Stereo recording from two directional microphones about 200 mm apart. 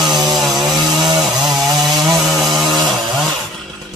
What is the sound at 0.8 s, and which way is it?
Chainsaw, 20° right (ahead or behind).